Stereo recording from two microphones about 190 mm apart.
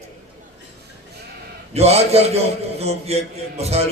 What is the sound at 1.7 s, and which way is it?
A man's voice, 35° right (ahead or behind).